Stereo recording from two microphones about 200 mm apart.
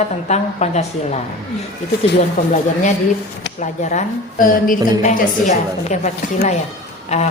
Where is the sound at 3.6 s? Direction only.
35° left (ahead or behind).